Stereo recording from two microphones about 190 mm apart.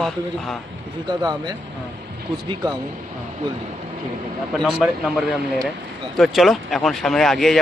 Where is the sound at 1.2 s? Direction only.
20° right (ahead or behind).